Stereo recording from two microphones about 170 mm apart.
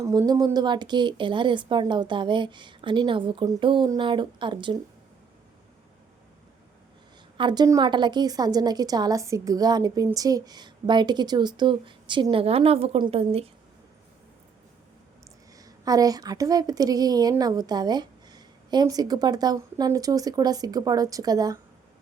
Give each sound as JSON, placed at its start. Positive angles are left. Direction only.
{"t": 0.0, "sound": "a woman's voice", "side_deg": -20}
{"t": 7.3, "sound": "a woman's voice", "side_deg": -25}
{"t": 15.5, "sound": "a woman's voice", "side_deg": -20}